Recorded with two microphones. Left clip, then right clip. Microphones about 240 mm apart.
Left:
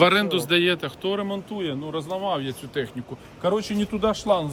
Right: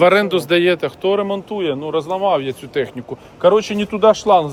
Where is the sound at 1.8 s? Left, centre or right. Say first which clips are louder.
Right 11 dB; right.